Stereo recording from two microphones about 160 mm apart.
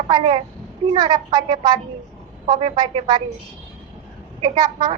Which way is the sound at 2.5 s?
30° right (ahead or behind).